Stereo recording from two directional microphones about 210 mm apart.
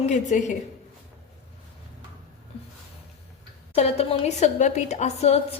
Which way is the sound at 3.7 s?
30° left (ahead or behind).